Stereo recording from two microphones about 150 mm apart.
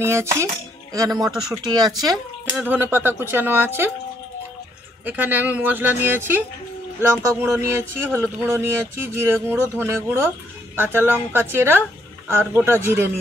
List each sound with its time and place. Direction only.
0.0 s speech: 15° right (ahead or behind)
1.7 s speech: 25° right (ahead or behind)
2.5 s speech: 10° right (ahead or behind)
5.0 s speech: 10° right (ahead or behind)